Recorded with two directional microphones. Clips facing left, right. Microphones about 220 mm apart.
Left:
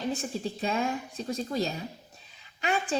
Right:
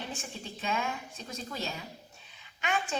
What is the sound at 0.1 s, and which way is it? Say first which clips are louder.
A woman's voice: left 9 dB; 35° left (ahead or behind).